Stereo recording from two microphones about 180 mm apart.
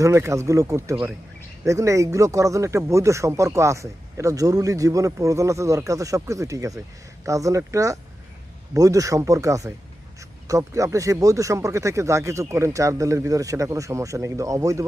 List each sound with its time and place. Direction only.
0.0 s speech: 15° right (ahead or behind)